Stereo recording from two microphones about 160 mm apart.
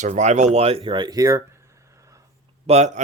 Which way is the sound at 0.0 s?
45° right (ahead or behind).